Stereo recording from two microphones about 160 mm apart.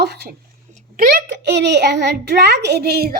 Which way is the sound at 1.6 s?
90° right.